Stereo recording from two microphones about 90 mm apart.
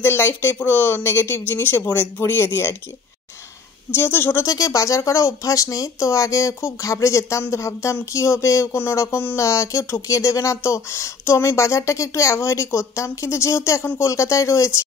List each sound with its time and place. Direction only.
0.0 s speech: 25° left (ahead or behind)
3.9 s speech: 25° left (ahead or behind)
4.5 s speech: 40° left (ahead or behind)